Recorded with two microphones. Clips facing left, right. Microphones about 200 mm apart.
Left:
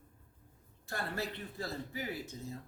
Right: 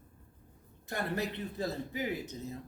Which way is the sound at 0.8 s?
20° right (ahead or behind).